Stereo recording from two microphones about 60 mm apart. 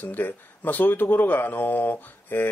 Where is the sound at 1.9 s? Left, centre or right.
Left.